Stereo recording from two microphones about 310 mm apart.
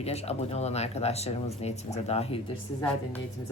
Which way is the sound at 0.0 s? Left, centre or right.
Centre.